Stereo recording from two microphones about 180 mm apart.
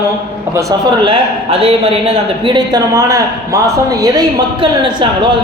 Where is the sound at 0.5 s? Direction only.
25° right (ahead or behind).